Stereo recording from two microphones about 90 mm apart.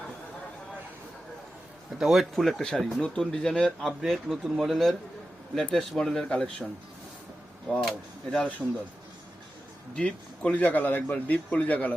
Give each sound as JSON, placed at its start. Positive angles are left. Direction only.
{"t": 2.0, "sound": "a man's voice", "side_deg": 0}
{"t": 7.8, "sound": "speech", "side_deg": 0}
{"t": 9.9, "sound": "a man's voice", "side_deg": 10}